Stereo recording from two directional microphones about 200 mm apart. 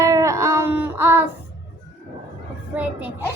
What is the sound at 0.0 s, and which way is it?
Baby cry, 15° right (ahead or behind).